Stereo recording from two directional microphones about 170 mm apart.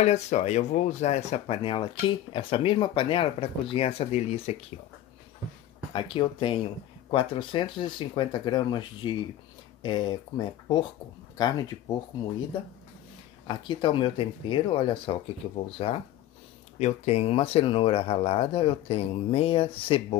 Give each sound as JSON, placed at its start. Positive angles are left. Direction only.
{"t": 0.0, "sound": "speech", "side_deg": 40}
{"t": 5.9, "sound": "speech", "side_deg": 30}
{"t": 13.5, "sound": "speech", "side_deg": 25}